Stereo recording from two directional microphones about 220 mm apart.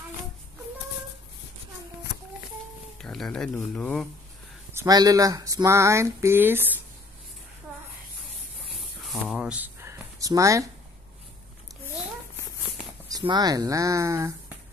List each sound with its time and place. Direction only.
3.0 s speech: centre (ahead or behind)
4.7 s speech: 15° right (ahead or behind)
8.6 s a sound: centre (ahead or behind)
13.1 s speech: 20° right (ahead or behind)